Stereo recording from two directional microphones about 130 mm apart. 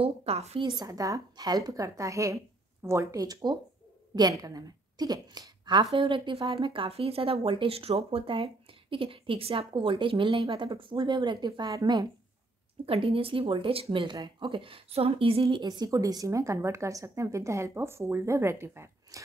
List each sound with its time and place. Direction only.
0.0 s speech: 50° right (ahead or behind)
0.8 s a woman's voice: 25° right (ahead or behind)
12.8 s speech: 45° right (ahead or behind)
15.6 s a woman's voice: 30° right (ahead or behind)